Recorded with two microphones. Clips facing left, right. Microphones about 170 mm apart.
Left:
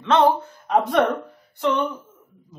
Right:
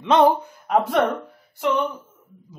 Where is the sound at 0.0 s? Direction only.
15° right (ahead or behind).